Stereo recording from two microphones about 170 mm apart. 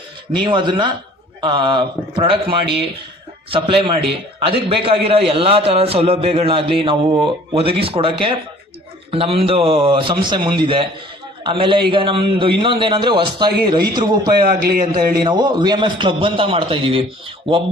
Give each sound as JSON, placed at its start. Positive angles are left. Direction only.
{"t": 0.3, "sound": "a man's voice", "side_deg": -30}
{"t": 9.1, "sound": "a man's voice", "side_deg": -35}
{"t": 14.4, "sound": "a man's voice", "side_deg": -60}
{"t": 15.3, "sound": "a man's voice", "side_deg": -25}